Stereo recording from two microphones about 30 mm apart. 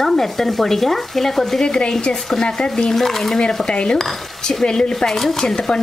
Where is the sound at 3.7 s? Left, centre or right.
Left.